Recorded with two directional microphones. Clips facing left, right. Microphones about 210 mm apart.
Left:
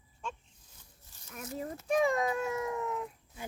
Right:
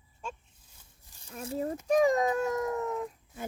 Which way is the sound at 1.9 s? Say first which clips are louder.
Right 4 dB; 40° right (ahead or behind).